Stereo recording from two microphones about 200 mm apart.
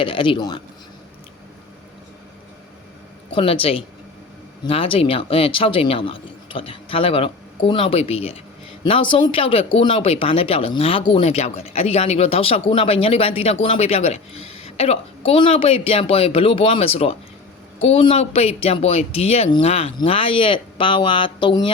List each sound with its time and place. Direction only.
0.0 s speech: 25° left (ahead or behind)
3.3 s speech: 30° left (ahead or behind)